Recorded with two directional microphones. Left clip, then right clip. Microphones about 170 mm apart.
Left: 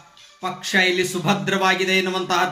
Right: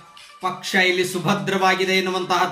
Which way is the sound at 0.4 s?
20° left (ahead or behind).